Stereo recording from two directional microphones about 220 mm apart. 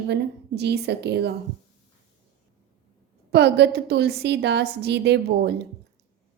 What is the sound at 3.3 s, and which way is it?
A woman's voice, 50° right (ahead or behind).